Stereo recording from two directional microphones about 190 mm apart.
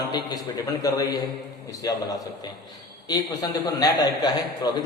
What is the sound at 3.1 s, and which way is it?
A man's voice, 20° left (ahead or behind).